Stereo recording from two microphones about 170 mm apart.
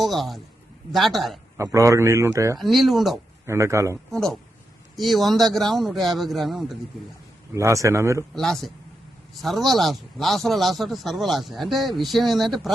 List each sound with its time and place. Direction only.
0.0 s a man's voice: centre (ahead or behind)
1.5 s a man's voice: 20° right (ahead or behind)
2.6 s a man's voice: centre (ahead or behind)
3.4 s a man's voice: 15° right (ahead or behind)
4.1 s a man's voice: 5° left (ahead or behind)
7.5 s a man's voice: 20° right (ahead or behind)
8.4 s a man's voice: centre (ahead or behind)